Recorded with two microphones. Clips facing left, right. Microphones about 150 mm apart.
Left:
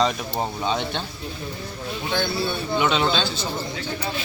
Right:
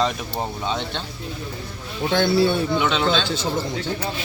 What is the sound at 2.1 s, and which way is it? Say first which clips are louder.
Speech: right 7 dB; 75° right (ahead or behind).